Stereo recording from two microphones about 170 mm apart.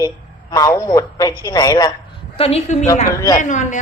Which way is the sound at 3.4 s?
45° left (ahead or behind).